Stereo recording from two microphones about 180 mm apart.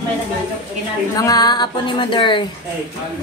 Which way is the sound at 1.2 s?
20° left (ahead or behind).